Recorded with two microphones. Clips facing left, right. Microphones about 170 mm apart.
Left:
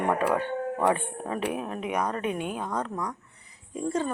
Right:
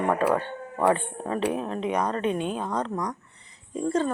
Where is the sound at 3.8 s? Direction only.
10° left (ahead or behind).